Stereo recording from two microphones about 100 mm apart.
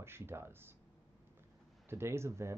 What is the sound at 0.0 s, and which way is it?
Speech, 25° right (ahead or behind).